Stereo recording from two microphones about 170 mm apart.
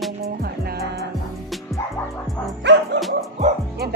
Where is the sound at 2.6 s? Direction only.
90° right.